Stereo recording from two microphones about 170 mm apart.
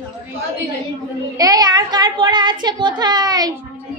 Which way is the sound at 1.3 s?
20° right (ahead or behind).